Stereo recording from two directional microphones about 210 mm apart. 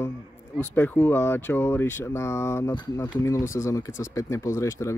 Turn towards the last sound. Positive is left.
turn(degrees=15)  # may be behind; listen again after turning